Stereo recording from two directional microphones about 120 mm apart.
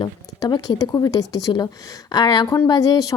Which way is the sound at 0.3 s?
35° left (ahead or behind).